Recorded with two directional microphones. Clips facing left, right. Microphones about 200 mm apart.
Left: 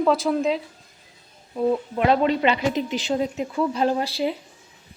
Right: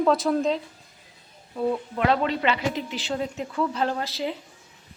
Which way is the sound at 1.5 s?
15° left (ahead or behind).